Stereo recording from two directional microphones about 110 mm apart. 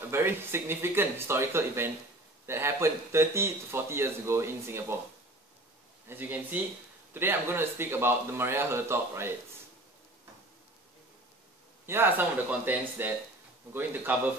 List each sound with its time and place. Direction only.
0.1 s speech: 20° right (ahead or behind)
6.0 s speech: 15° right (ahead or behind)
11.8 s speech: 20° right (ahead or behind)